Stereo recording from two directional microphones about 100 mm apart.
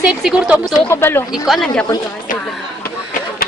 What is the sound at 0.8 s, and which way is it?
Speech, 25° left (ahead or behind).